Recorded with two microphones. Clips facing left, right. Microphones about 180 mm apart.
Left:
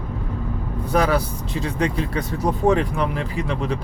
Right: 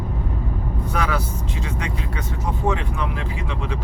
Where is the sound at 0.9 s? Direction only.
35° left (ahead or behind).